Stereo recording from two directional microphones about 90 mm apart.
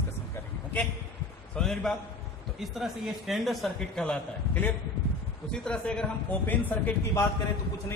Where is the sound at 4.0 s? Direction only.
15° left (ahead or behind).